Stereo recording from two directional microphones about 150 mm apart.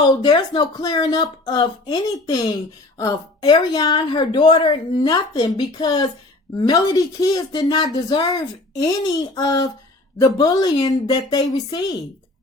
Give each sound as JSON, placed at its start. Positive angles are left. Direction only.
{"t": 0.1, "sound": "a woman's voice", "side_deg": 30}